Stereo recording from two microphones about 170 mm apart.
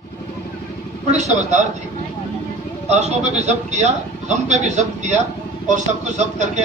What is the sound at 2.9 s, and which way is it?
A man's voice, 40° right (ahead or behind).